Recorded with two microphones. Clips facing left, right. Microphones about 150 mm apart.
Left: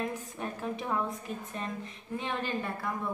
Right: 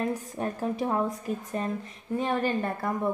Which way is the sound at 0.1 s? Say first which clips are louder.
Right 6 dB; 40° right (ahead or behind).